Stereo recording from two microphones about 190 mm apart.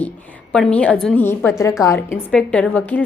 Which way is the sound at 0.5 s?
5° left (ahead or behind).